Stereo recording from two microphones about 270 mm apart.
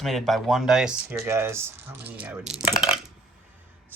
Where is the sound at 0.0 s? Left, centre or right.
Centre.